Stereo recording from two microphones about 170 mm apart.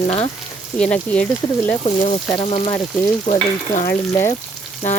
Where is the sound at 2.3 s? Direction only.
30° left (ahead or behind).